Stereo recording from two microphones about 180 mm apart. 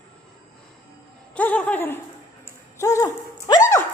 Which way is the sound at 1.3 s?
10° left (ahead or behind).